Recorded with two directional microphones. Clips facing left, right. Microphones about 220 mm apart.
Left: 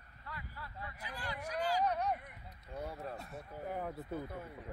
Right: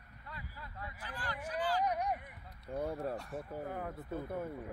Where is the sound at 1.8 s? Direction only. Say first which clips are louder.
Even; 10° right (ahead or behind).